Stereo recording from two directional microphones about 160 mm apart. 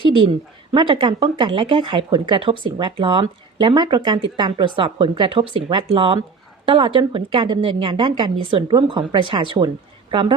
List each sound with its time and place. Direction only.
0.7 s a woman's voice: 30° right (ahead or behind)